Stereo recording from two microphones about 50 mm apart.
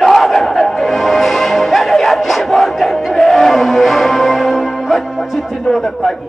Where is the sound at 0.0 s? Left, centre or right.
Centre.